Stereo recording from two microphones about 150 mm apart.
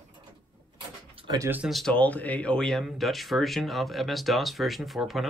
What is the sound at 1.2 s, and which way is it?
Speech, 25° right (ahead or behind).